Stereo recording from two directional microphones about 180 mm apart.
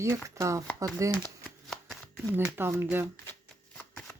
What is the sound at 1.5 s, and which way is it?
Shuffling cards, centre (ahead or behind).